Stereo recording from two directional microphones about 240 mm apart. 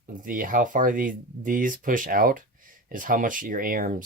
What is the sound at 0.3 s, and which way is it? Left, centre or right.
Speech, right.